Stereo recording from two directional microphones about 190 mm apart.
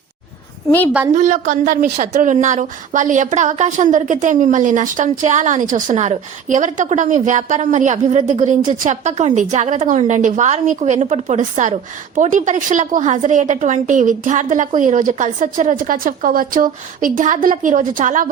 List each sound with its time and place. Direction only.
1.1 s a woman's voice: 40° right (ahead or behind)